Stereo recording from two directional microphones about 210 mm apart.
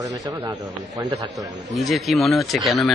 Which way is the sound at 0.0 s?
15° right (ahead or behind).